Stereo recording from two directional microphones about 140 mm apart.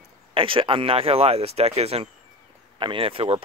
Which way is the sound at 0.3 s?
40° right (ahead or behind).